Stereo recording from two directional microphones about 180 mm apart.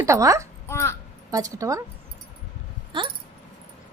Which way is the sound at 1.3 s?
20° right (ahead or behind).